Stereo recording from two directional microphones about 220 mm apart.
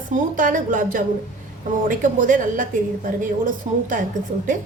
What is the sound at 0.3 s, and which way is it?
A woman's voice, 35° right (ahead or behind).